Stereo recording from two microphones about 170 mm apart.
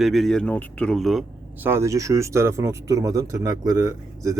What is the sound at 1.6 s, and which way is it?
Speech, 15° right (ahead or behind).